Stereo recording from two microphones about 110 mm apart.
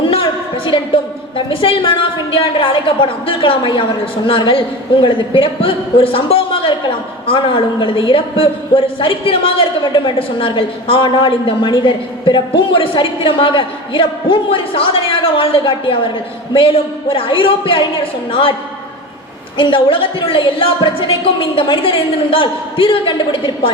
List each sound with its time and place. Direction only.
0.0 s a sound: 55° left (ahead or behind)
1.5 s a man's voice: 55° left (ahead or behind)
19.5 s a man's voice: 50° left (ahead or behind)